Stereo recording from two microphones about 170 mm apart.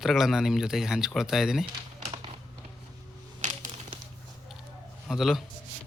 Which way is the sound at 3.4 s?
40° right (ahead or behind).